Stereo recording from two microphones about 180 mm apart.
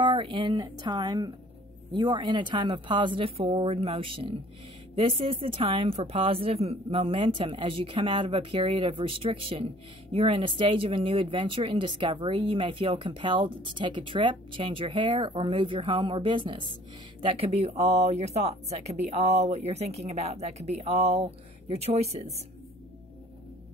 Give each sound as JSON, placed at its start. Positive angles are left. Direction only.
{"t": 0.0, "sound": "speech", "side_deg": -25}